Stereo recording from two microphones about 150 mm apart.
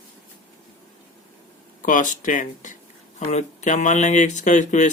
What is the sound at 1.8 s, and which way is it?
Speech, 60° left (ahead or behind).